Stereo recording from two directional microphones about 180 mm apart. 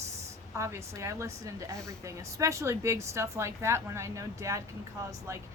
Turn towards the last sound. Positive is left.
turn(degrees=-15)  # may be behind; listen again after turning